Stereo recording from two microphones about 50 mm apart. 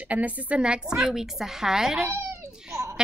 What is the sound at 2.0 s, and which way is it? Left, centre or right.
Cat, right.